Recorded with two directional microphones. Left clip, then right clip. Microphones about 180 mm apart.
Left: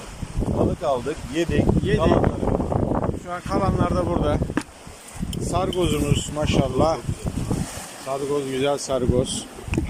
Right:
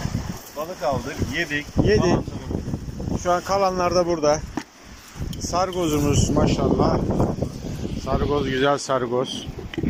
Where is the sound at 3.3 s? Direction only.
15° right (ahead or behind).